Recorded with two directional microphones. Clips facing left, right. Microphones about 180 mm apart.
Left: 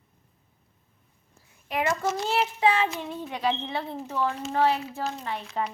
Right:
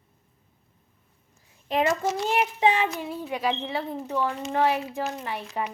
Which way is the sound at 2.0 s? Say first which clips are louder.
Right 1 dB; 15° right (ahead or behind).